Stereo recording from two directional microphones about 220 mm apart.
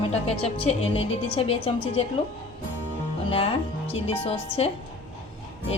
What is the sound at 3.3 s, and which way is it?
A woman's voice, 25° left (ahead or behind).